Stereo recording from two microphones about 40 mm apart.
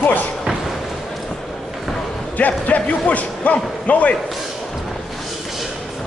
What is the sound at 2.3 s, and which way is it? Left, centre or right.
A man's voice, left.